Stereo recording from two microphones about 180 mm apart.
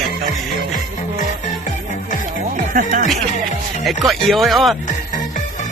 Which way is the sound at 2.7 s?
45° right (ahead or behind).